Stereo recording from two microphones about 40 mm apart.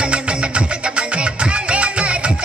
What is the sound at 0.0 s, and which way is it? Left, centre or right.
Music, right.